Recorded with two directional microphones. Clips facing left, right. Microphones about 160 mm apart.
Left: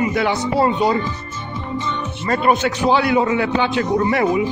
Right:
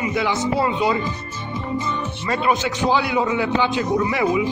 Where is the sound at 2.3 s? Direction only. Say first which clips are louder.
Left 4 dB; 50° left (ahead or behind).